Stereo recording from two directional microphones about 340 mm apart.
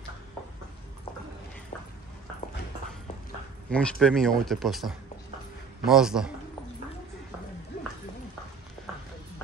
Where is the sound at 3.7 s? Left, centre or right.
Centre.